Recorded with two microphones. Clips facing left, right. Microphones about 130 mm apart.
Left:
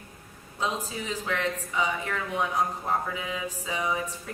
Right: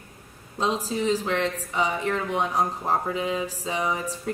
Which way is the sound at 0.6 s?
35° right (ahead or behind).